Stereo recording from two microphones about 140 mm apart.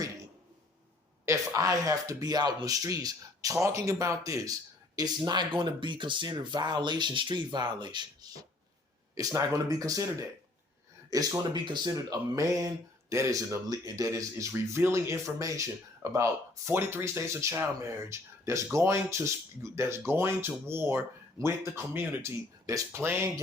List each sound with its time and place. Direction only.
1.2 s speech: 20° right (ahead or behind)